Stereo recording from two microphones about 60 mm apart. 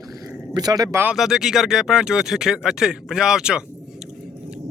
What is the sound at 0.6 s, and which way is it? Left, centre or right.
Speech, right.